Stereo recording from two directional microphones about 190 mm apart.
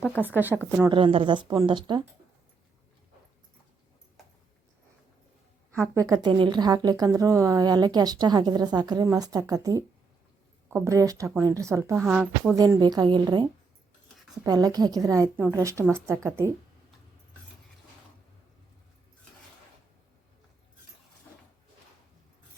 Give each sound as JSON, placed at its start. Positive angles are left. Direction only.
{"t": 0.5, "sound": "speech", "side_deg": 0}
{"t": 0.9, "sound": "speech", "side_deg": -25}
{"t": 5.9, "sound": "a woman's voice", "side_deg": -15}